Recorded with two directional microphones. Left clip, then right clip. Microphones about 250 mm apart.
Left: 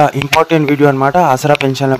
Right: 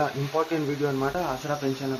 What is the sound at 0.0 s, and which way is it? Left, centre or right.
A man's voice, left.